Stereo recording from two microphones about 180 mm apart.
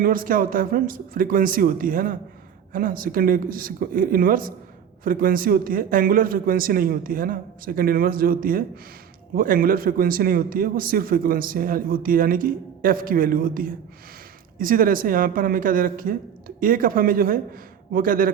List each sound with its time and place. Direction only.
0.0 s a man's voice: 50° right (ahead or behind)